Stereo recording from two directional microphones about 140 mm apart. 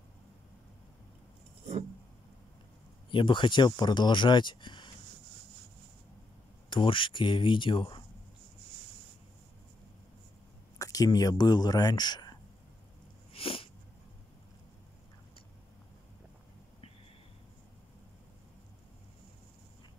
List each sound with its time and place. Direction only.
3.1 s speech: 35° left (ahead or behind)
6.7 s speech: 35° left (ahead or behind)
10.8 s speech: 25° left (ahead or behind)
13.3 s cat: 40° left (ahead or behind)